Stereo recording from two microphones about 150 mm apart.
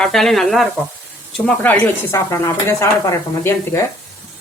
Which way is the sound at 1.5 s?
10° left (ahead or behind).